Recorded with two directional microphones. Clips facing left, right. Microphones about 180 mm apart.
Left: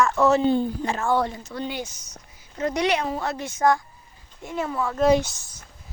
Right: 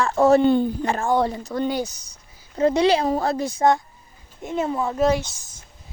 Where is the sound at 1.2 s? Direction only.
35° right (ahead or behind).